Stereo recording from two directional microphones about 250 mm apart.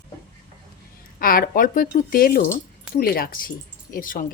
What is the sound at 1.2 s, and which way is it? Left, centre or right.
Speech, left.